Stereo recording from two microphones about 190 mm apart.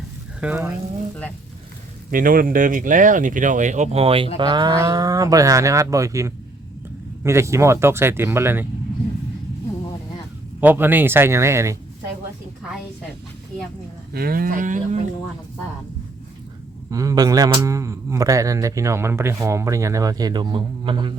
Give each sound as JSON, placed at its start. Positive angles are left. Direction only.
{"t": 0.3, "sound": "speech", "side_deg": -10}
{"t": 2.0, "sound": "speech", "side_deg": -45}
{"t": 10.6, "sound": "speech", "side_deg": -10}
{"t": 14.1, "sound": "speech", "side_deg": -55}
{"t": 16.9, "sound": "speech", "side_deg": -20}